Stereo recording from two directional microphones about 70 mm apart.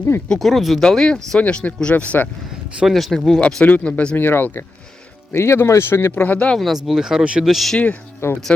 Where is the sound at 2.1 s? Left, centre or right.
Left.